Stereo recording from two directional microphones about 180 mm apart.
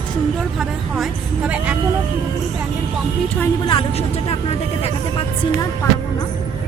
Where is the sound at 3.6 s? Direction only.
30° left (ahead or behind).